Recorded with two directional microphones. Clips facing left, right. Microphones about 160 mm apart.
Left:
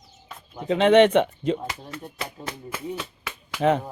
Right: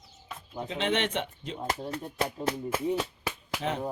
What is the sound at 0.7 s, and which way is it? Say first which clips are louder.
Speech: left 14 dB; 65° left (ahead or behind).